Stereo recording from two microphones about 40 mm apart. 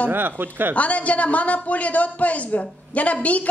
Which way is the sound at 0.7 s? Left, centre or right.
Left.